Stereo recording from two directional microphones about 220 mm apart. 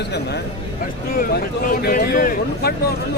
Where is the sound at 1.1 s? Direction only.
40° left (ahead or behind).